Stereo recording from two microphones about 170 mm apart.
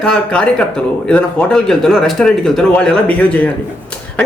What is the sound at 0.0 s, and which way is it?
A man's voice, 5° left (ahead or behind).